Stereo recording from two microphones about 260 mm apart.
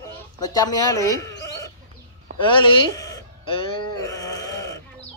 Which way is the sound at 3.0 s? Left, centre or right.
Centre.